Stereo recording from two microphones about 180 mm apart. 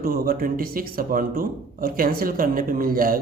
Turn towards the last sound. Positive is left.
turn(degrees=-50)  # may be behind; listen again after turning